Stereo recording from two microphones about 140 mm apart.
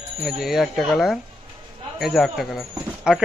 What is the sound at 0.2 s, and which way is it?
Speech, centre (ahead or behind).